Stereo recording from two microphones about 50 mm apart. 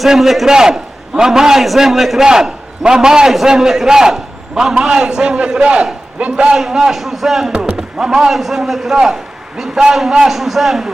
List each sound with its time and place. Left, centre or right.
0.0 s a man's voice: centre
7.5 s basketball bounce: centre
7.8 s a man's voice: centre